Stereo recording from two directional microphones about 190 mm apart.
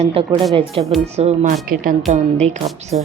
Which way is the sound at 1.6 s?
50° right (ahead or behind).